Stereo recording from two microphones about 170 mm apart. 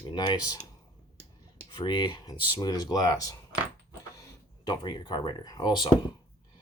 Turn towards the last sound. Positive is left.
turn(degrees=25)  # may be behind; listen again after turning